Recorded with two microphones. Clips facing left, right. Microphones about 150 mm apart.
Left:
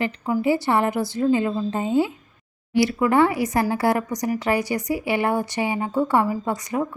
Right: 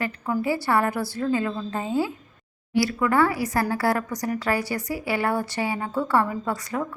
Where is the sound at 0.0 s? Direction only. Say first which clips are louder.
Left 4 dB; 20° left (ahead or behind).